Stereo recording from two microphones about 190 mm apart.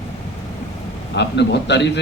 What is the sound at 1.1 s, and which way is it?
Speech, 65° left (ahead or behind).